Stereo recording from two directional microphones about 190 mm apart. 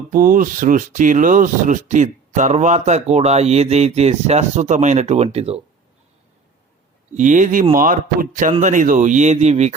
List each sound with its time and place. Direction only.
0.1 s speech: 45° right (ahead or behind)
7.1 s a man's voice: 40° right (ahead or behind)